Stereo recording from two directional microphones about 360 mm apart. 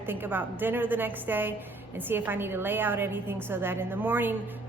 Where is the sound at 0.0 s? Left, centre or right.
Centre.